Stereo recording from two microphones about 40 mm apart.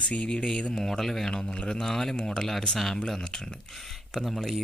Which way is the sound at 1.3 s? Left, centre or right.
Centre.